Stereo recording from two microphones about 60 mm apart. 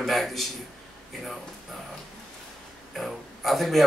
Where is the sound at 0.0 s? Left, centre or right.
Centre.